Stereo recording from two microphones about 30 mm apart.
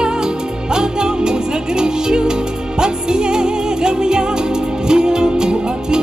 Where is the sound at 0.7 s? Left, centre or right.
Right.